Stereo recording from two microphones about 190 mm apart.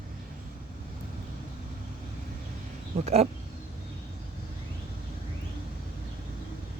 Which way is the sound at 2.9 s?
35° right (ahead or behind).